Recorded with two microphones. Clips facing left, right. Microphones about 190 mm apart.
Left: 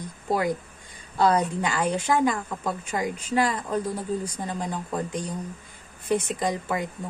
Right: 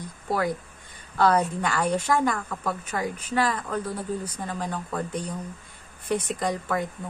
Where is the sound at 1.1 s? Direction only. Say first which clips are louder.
Even; 10° left (ahead or behind).